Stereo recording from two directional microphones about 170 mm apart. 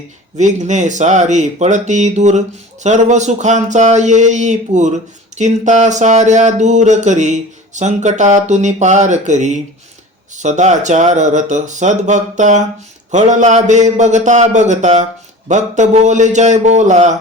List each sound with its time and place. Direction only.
0.3 s speech: 45° right (ahead or behind)